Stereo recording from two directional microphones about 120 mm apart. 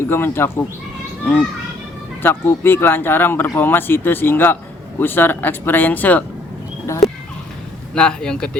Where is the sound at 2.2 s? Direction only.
20° left (ahead or behind).